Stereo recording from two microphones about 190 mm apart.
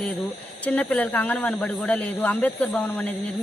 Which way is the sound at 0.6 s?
10° left (ahead or behind).